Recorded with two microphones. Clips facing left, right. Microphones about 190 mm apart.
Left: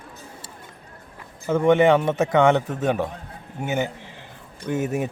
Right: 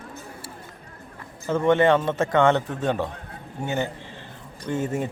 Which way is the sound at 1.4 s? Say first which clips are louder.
Left 2 dB; 15° left (ahead or behind).